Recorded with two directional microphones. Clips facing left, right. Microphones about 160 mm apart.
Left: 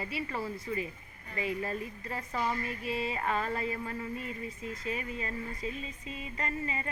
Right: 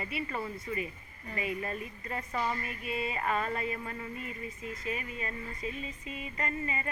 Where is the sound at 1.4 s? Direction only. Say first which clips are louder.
Left 2 dB; 30° left (ahead or behind).